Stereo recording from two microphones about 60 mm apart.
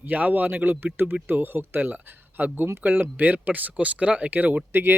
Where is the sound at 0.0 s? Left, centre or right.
Right.